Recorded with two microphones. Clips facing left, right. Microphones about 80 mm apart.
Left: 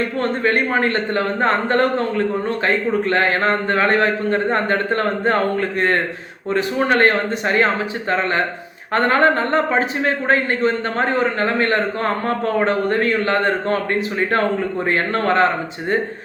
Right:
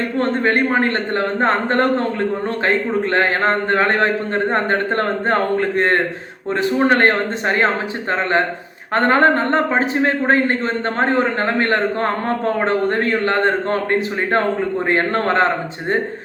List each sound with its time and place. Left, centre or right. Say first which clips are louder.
0.2 s a man's voice: right 3 dB; right
9.0 s a man's voice: right 1 dB; right
14.8 s a man's voice: even; right